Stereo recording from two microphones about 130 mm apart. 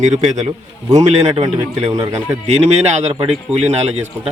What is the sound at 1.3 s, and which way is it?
Speech, 50° right (ahead or behind).